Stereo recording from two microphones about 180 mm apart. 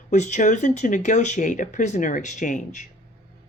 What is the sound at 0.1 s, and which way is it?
Speech, 40° left (ahead or behind).